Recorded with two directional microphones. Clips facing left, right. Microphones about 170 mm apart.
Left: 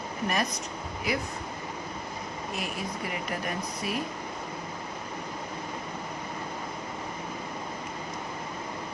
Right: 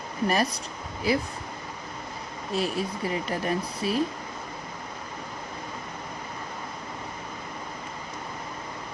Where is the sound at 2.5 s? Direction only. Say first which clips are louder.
Right 8 dB; 30° right (ahead or behind).